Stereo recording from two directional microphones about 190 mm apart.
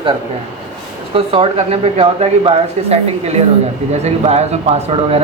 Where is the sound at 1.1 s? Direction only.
30° right (ahead or behind).